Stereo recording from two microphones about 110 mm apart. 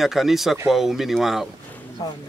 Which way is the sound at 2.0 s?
35° left (ahead or behind).